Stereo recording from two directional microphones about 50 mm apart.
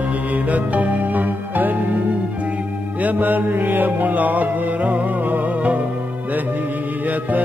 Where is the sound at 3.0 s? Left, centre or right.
Right.